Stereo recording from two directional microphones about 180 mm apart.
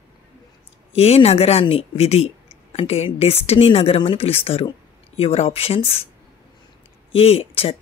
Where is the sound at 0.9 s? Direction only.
35° left (ahead or behind).